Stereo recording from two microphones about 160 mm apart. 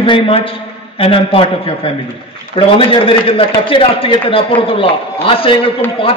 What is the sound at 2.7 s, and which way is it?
A man's voice, 35° left (ahead or behind).